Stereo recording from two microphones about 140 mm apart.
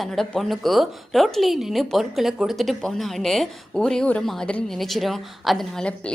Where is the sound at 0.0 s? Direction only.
Centre (ahead or behind).